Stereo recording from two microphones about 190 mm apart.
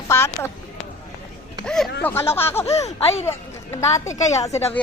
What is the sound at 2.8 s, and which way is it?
Speech, 35° left (ahead or behind).